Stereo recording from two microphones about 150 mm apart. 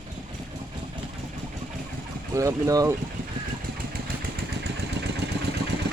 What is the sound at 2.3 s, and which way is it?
Speech, 20° right (ahead or behind).